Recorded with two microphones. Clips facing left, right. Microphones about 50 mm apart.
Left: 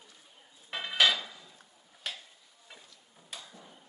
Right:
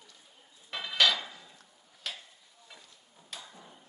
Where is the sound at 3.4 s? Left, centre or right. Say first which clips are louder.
Right 1 dB; centre.